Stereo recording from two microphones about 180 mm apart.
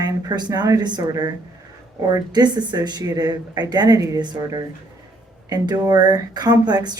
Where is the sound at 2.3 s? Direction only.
25° right (ahead or behind).